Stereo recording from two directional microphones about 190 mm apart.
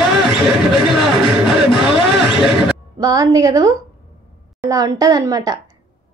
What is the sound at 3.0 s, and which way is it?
Speech, 20° right (ahead or behind).